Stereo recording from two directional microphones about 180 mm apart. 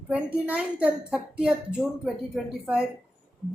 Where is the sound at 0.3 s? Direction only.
10° right (ahead or behind).